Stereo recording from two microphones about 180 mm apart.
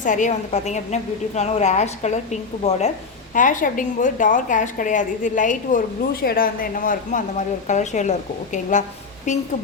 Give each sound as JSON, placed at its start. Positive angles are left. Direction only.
{"t": 0.0, "sound": "a woman's voice", "side_deg": 45}
{"t": 9.3, "sound": "a woman's voice", "side_deg": 40}